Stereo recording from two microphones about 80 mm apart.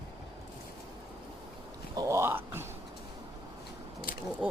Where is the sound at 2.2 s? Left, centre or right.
Right.